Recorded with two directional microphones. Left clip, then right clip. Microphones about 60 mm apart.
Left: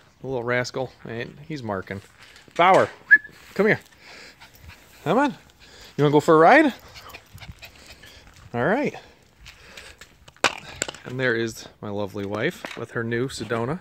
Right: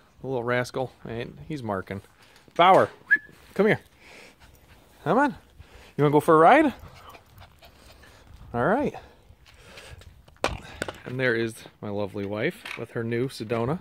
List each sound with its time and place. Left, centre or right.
0.2 s speech: centre
2.5 s speech: right
2.8 s whistling: centre
5.0 s a sound: centre
6.0 s speech: centre
7.1 s dog: right
8.5 s speech: centre
10.6 s speech: centre
12.8 s speech: right